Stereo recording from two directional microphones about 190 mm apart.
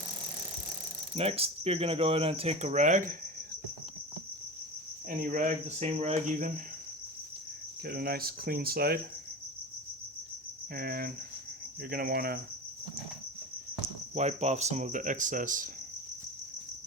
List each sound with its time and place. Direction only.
1.1 s speech: 30° right (ahead or behind)
5.0 s speech: 45° right (ahead or behind)
7.9 s speech: 55° right (ahead or behind)
10.8 s speech: 50° right (ahead or behind)
14.2 s speech: 35° right (ahead or behind)